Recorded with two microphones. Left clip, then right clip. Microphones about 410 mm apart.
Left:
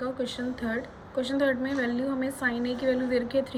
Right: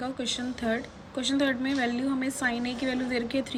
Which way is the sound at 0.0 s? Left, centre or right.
Centre.